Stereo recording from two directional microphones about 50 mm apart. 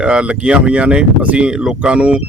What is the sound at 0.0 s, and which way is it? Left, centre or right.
Speech, right.